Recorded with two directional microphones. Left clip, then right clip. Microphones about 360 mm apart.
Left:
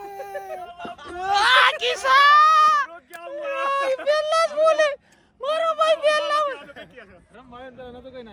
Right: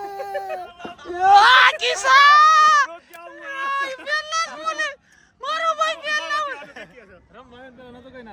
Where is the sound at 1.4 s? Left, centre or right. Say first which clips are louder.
Right 4 dB; centre.